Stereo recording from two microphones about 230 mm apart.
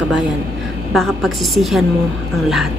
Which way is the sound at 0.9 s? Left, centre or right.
Centre.